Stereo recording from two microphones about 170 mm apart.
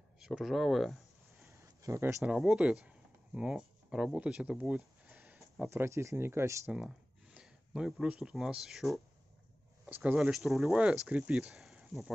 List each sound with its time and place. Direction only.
0.2 s speech: centre (ahead or behind)
1.8 s speech: 15° right (ahead or behind)
2.3 s speech: 5° right (ahead or behind)
6.7 s speech: 5° right (ahead or behind)